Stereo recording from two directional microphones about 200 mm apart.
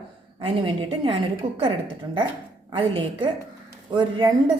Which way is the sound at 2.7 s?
25° right (ahead or behind).